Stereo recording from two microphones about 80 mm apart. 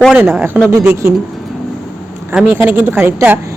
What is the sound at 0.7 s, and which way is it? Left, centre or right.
Speech, right.